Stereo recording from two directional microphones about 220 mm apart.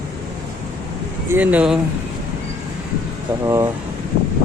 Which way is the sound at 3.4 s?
15° right (ahead or behind).